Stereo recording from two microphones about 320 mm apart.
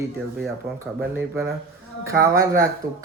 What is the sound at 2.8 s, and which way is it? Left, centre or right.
Speech, right.